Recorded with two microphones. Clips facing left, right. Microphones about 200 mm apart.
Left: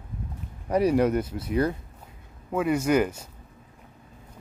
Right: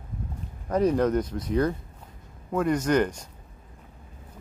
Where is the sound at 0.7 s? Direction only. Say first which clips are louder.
Left 1 dB; 10° left (ahead or behind).